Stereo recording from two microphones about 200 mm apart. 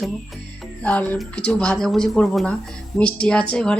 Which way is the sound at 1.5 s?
5° left (ahead or behind).